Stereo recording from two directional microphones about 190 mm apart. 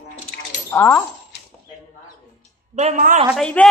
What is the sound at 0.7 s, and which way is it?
Speech, 10° left (ahead or behind).